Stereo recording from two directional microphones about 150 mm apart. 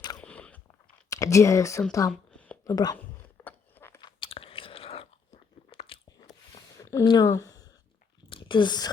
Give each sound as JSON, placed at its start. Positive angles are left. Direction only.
{"t": 0.2, "sound": "biting", "side_deg": 5}
{"t": 1.1, "sound": "speech", "side_deg": 20}
{"t": 2.3, "sound": "a sound", "side_deg": 10}
{"t": 2.6, "sound": "speech", "side_deg": 25}
{"t": 3.0, "sound": "a sound", "side_deg": 10}
{"t": 4.0, "sound": "chewing", "side_deg": 35}
{"t": 6.1, "sound": "biting", "side_deg": 25}
{"t": 7.0, "sound": "speech", "side_deg": 30}
{"t": 7.3, "sound": "a sound", "side_deg": 20}
{"t": 8.3, "sound": "whispering", "side_deg": 35}